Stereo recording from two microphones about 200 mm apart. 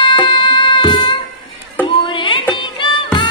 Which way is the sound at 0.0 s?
25° left (ahead or behind).